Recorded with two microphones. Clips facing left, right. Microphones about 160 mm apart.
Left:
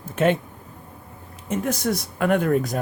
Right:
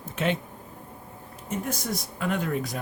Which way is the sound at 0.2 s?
50° left (ahead or behind).